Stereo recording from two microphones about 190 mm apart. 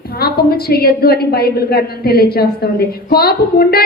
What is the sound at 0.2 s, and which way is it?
A woman's voice, 55° left (ahead or behind).